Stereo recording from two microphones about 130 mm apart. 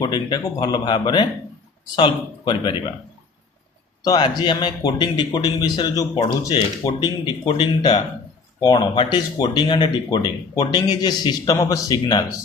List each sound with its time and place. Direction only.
0.0 s speech: 30° left (ahead or behind)
4.0 s speech: 30° left (ahead or behind)